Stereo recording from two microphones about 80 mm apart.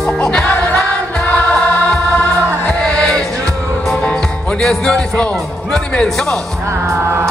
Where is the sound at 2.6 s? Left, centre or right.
Centre.